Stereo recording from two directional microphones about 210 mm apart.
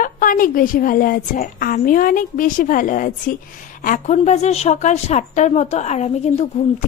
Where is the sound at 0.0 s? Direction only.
40° left (ahead or behind).